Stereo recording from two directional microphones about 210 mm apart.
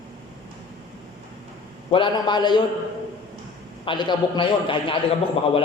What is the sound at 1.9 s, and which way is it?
Speech, 20° left (ahead or behind).